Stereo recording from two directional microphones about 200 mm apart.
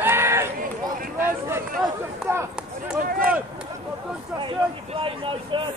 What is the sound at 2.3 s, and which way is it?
Run, 15° right (ahead or behind).